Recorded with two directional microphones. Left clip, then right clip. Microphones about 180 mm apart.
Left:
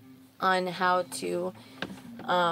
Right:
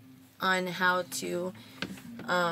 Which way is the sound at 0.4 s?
25° right (ahead or behind).